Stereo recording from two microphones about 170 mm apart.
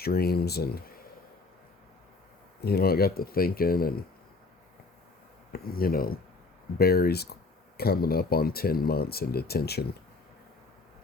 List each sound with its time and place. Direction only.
0.0 s speech: 65° left (ahead or behind)
2.6 s speech: 65° left (ahead or behind)
5.5 s speech: 65° left (ahead or behind)